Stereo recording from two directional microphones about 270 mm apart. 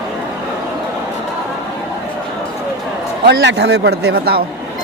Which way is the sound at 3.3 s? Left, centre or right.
Right.